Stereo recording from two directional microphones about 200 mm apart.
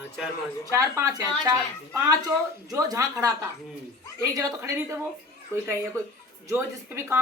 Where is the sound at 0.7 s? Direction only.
15° right (ahead or behind).